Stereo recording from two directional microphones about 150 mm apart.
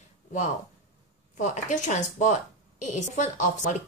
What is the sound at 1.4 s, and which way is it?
Speech, 55° left (ahead or behind).